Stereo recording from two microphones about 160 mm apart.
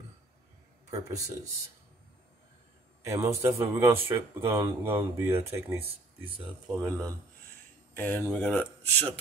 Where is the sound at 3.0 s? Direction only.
20° right (ahead or behind).